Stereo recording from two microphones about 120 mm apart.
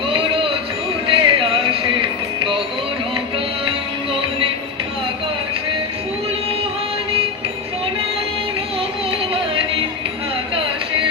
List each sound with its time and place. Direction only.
0.1 s a sound: 45° right (ahead or behind)
1.0 s music: 45° right (ahead or behind)
4.1 s music: 50° right (ahead or behind)